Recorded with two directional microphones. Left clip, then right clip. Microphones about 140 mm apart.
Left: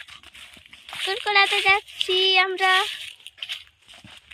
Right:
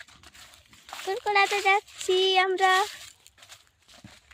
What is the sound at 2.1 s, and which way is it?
Speech, 40° right (ahead or behind).